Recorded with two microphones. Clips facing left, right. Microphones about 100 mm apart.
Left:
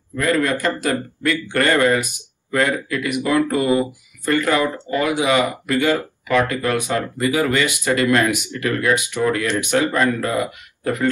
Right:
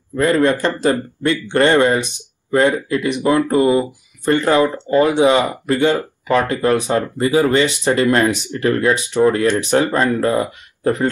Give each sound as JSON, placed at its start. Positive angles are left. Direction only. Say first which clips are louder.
{"t": 0.1, "sound": "a man's voice", "louder": "right 4 dB", "side_deg": -30}